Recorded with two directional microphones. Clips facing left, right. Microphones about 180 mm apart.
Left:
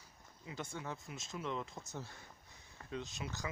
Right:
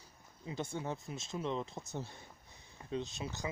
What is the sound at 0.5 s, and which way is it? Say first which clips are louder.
Speech: right 5 dB; 25° right (ahead or behind).